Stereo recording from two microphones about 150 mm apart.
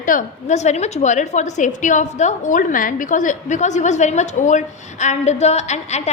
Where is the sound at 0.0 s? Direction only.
60° left (ahead or behind).